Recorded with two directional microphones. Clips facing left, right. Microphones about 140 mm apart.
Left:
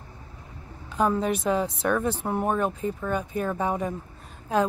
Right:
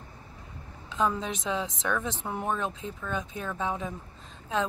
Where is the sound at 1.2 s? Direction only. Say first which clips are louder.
Left 7 dB; 10° left (ahead or behind).